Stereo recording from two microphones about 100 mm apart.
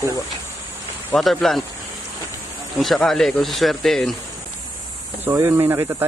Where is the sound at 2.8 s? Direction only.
5° left (ahead or behind).